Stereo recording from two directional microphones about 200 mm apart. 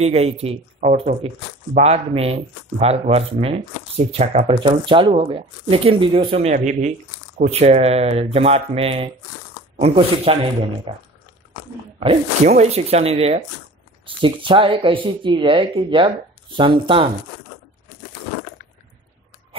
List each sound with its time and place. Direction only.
0.0 s speech: 30° right (ahead or behind)